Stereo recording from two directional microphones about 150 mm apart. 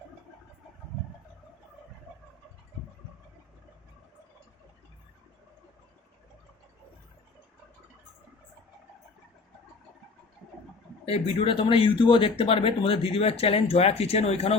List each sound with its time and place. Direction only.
11.0 s speech: 40° left (ahead or behind)